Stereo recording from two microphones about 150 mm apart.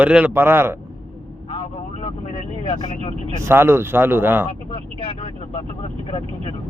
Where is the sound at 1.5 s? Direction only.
40° left (ahead or behind).